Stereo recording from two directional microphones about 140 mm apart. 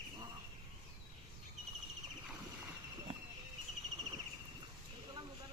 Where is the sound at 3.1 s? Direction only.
35° right (ahead or behind).